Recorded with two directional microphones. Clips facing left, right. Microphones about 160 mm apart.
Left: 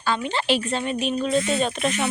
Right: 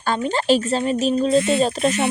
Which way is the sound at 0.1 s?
40° right (ahead or behind).